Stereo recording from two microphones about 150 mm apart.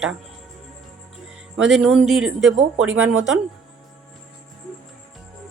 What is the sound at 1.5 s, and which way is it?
Speech, centre (ahead or behind).